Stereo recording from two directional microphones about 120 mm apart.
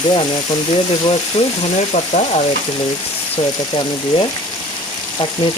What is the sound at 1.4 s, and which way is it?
Frying, 60° left (ahead or behind).